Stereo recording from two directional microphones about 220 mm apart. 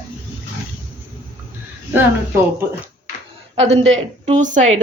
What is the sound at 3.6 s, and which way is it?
Speech, 55° right (ahead or behind).